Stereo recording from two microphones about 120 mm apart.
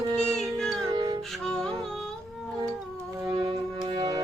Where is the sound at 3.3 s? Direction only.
45° right (ahead or behind).